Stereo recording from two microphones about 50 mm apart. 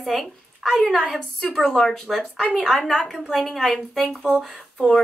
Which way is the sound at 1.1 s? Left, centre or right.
Centre.